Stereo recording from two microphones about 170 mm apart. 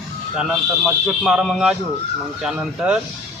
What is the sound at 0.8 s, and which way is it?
Speech, centre (ahead or behind).